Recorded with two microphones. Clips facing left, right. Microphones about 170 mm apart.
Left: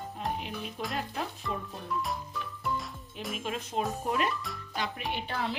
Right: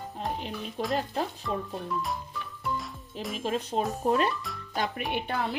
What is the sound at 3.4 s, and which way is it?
Speech, 35° right (ahead or behind).